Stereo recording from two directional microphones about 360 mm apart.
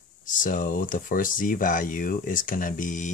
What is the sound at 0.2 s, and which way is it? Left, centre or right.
Speech, left.